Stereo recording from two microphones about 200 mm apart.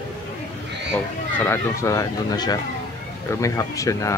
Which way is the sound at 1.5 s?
15° left (ahead or behind).